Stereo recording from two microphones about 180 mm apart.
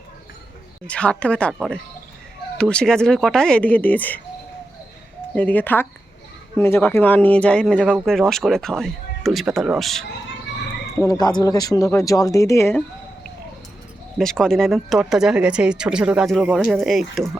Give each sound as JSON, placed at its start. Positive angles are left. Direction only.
{"t": 0.9, "sound": "speech", "side_deg": 5}
{"t": 5.3, "sound": "speech", "side_deg": 10}
{"t": 11.0, "sound": "speech", "side_deg": 20}
{"t": 14.2, "sound": "speech", "side_deg": 5}